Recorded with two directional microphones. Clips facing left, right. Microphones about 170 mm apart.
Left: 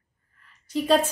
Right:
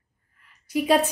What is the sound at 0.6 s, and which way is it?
Speech, 10° right (ahead or behind).